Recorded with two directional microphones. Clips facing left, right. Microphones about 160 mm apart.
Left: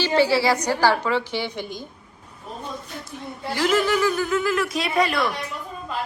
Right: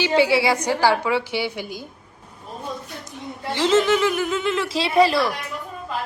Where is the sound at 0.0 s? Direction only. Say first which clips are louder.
Right 1 dB; 15° right (ahead or behind).